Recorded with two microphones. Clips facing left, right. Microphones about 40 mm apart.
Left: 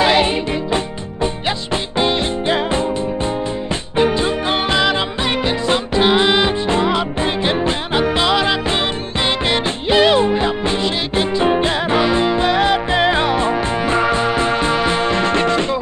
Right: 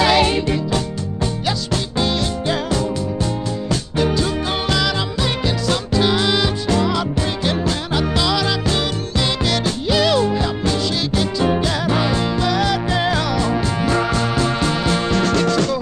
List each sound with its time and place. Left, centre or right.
0.0 s music: left
4.0 s music: left